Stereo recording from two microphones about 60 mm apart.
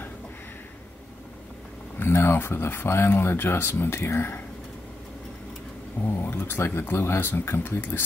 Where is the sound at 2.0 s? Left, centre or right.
Left.